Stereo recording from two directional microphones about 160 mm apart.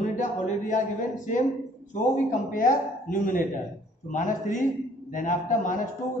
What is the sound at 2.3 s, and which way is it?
A man's voice, 55° left (ahead or behind).